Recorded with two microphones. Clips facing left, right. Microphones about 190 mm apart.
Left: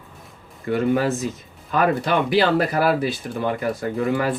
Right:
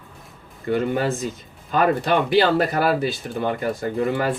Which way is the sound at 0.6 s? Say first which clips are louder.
Left 2 dB; 30° right (ahead or behind).